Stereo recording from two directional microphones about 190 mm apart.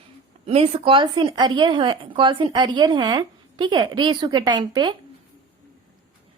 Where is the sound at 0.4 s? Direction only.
30° right (ahead or behind).